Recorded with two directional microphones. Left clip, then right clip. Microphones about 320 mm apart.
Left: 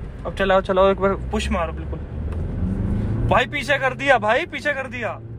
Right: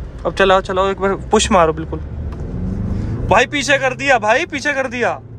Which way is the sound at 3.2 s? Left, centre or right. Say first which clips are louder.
Right 6 dB; centre.